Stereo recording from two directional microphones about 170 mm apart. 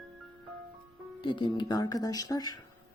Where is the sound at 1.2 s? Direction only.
30° left (ahead or behind).